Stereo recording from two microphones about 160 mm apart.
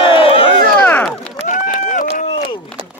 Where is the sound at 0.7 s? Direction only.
5° left (ahead or behind).